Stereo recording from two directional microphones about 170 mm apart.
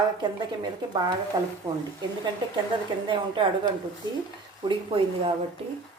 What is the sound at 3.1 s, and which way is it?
Speech, 30° right (ahead or behind).